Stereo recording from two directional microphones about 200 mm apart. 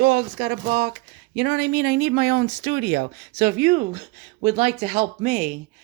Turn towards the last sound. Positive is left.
turn(degrees=-35)  # may be behind; listen again after turning